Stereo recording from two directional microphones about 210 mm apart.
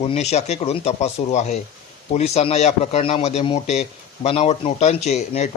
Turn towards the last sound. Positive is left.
turn(degrees=30)  # may be behind; listen again after turning